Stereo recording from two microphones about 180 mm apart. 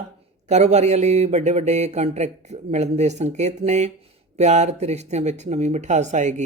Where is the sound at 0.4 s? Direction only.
40° right (ahead or behind).